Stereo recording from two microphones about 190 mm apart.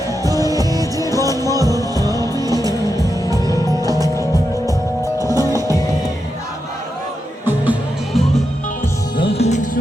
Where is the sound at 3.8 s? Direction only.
20° right (ahead or behind).